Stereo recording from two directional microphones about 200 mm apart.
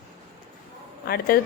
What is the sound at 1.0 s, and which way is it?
Speech, 50° left (ahead or behind).